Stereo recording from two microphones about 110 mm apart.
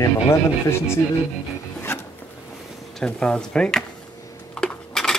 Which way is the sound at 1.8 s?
20° left (ahead or behind).